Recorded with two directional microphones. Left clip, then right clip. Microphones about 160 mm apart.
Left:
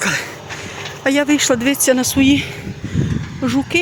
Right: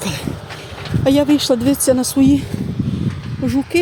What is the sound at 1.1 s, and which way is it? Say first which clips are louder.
Speech: right 1 dB; 20° right (ahead or behind).